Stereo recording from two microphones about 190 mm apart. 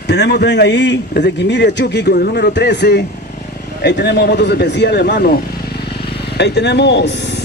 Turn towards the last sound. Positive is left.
turn(degrees=65)  # may be behind; listen again after turning